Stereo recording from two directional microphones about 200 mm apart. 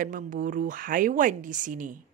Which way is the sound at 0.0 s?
40° right (ahead or behind).